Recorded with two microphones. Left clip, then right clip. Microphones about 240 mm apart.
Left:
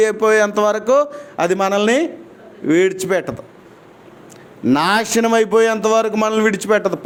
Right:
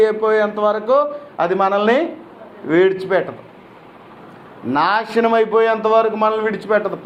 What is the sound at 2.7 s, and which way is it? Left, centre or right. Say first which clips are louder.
Speech: right 1 dB; left.